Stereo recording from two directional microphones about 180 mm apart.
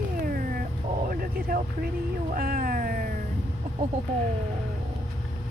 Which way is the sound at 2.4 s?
55° right (ahead or behind).